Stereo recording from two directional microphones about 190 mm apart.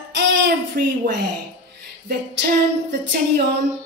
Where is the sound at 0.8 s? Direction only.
50° right (ahead or behind).